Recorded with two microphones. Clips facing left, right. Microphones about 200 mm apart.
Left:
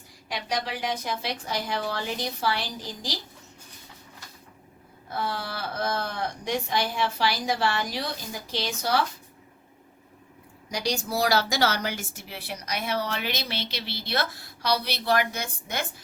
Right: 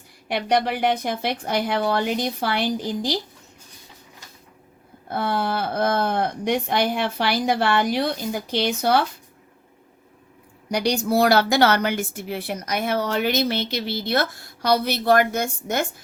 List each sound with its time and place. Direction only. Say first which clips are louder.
0.3 s a woman's voice: right 9 dB; 60° right (ahead or behind)
5.0 s a woman's voice: right 7 dB; 55° right (ahead or behind)
10.7 s speech: right 8 dB; 60° right (ahead or behind)